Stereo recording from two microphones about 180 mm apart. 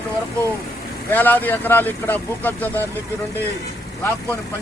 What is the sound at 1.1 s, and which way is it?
Speech, 10° left (ahead or behind).